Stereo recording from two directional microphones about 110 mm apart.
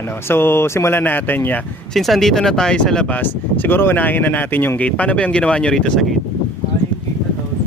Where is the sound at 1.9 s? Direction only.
Centre (ahead or behind).